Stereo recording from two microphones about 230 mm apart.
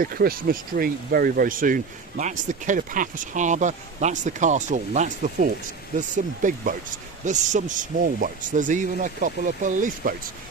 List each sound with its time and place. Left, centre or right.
0.0 s speech: right